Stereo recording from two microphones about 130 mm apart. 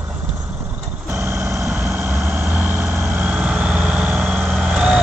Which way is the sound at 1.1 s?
15° right (ahead or behind).